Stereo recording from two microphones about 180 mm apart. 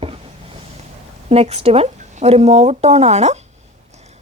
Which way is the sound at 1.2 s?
35° right (ahead or behind).